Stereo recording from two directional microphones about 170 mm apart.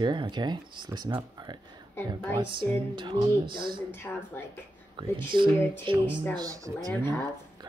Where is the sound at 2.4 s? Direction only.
30° right (ahead or behind).